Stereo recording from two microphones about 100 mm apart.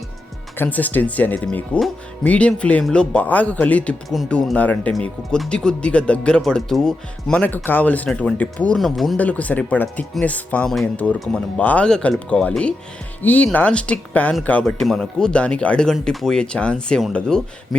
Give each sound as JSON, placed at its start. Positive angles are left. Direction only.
{"t": 0.6, "sound": "speech", "side_deg": 15}
{"t": 7.4, "sound": "speech", "side_deg": 20}
{"t": 9.1, "sound": "speech", "side_deg": 15}
{"t": 14.6, "sound": "speech", "side_deg": 5}